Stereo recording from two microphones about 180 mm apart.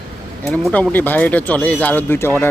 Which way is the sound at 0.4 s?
5° left (ahead or behind).